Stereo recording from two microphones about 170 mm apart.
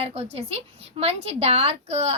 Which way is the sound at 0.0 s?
35° right (ahead or behind).